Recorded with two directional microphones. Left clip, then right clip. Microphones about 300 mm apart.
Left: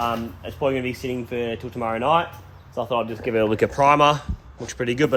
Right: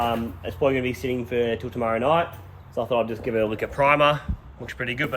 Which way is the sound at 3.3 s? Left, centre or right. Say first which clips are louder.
Left 5 dB; left.